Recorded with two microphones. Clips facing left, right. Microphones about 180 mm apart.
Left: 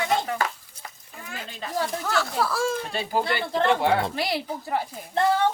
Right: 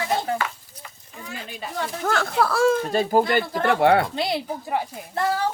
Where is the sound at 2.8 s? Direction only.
45° right (ahead or behind).